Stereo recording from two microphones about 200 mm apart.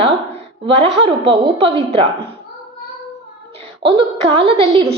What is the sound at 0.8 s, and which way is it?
A woman's voice, 30° right (ahead or behind).